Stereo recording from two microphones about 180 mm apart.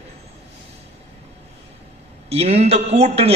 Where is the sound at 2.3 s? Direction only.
35° right (ahead or behind).